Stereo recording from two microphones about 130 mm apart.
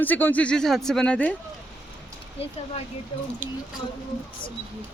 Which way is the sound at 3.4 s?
90° right.